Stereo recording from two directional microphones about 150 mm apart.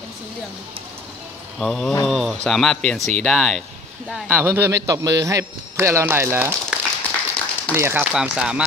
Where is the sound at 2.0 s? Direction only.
Centre (ahead or behind).